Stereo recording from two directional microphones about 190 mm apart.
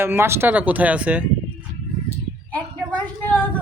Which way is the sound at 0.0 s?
10° right (ahead or behind).